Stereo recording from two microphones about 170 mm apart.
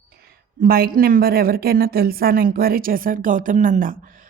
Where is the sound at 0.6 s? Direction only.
60° right (ahead or behind).